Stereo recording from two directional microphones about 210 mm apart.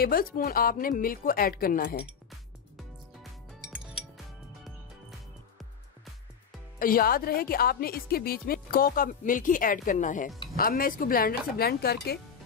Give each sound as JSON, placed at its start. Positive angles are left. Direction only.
{"t": 0.0, "sound": "a woman's voice", "side_deg": 45}
{"t": 6.8, "sound": "a woman's voice", "side_deg": 45}